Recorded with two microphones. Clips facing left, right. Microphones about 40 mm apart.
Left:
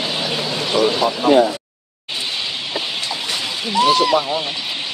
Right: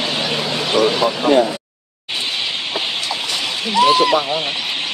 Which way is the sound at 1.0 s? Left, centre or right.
Centre.